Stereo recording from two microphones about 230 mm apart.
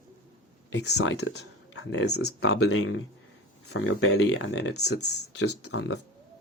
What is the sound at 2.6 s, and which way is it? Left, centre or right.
Speech, left.